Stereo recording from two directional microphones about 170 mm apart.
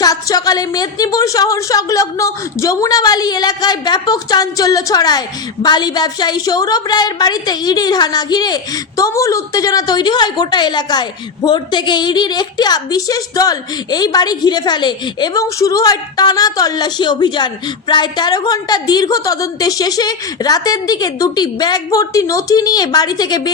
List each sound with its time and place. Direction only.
0.0 s a woman's voice: 20° left (ahead or behind)